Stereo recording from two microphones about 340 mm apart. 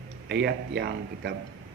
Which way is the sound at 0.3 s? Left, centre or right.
Right.